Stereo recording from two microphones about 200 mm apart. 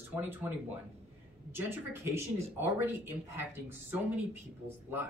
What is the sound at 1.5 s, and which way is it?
Speech, 10° right (ahead or behind).